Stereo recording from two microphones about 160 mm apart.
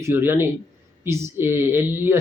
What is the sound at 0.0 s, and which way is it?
Speech, 15° right (ahead or behind).